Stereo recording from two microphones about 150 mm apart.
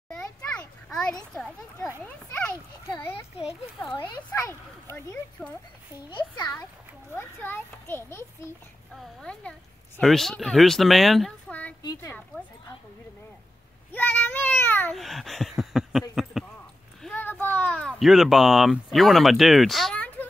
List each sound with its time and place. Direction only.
0.2 s children playing: 5° left (ahead or behind)
2.0 s a child's voice: 10° left (ahead or behind)
2.9 s a child's voice: 35° left (ahead or behind)
4.3 s a child's voice: 15° left (ahead or behind)
6.0 s a child's voice: 30° left (ahead or behind)
7.2 s a child's voice: 15° left (ahead or behind)
9.2 s speech: 5° left (ahead or behind)
11.8 s speech: 30° left (ahead or behind)
13.9 s a child's voice: 15° left (ahead or behind)
15.0 s a sound: centre (ahead or behind)
17.1 s a child's voice: 15° left (ahead or behind)